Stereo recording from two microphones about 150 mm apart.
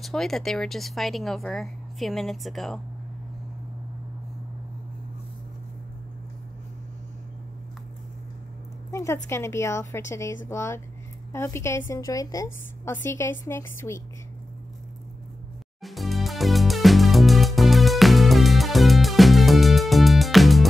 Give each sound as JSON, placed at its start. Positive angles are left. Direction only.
{"t": 0.0, "sound": "speech", "side_deg": 0}
{"t": 8.9, "sound": "a woman's voice", "side_deg": 20}
{"t": 15.8, "sound": "music", "side_deg": 0}